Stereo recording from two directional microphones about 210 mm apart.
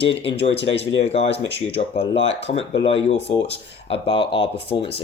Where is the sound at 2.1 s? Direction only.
60° left (ahead or behind).